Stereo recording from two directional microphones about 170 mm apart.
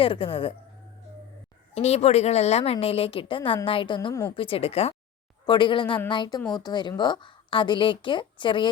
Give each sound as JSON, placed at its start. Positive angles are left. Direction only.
{"t": 0.0, "sound": "a woman's voice", "side_deg": 30}
{"t": 1.7, "sound": "a woman's voice", "side_deg": 40}
{"t": 4.4, "sound": "a woman's voice", "side_deg": 35}